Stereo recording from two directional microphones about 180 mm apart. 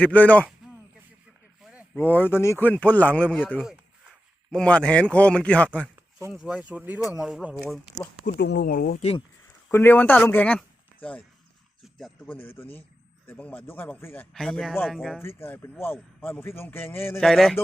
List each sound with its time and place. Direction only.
0.0 s a man's voice: 10° left (ahead or behind)
2.0 s a man's voice: 10° left (ahead or behind)
6.3 s speech: 5° right (ahead or behind)
8.2 s speech: 65° left (ahead or behind)
9.0 s speech: 35° left (ahead or behind)
9.6 s a man's voice: 10° left (ahead or behind)
11.9 s a man's voice: 5° left (ahead or behind)
15.2 s a man's voice: 15° left (ahead or behind)
17.2 s speech: centre (ahead or behind)